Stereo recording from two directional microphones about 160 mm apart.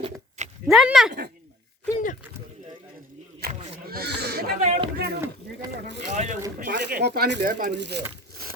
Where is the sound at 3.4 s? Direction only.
80° right.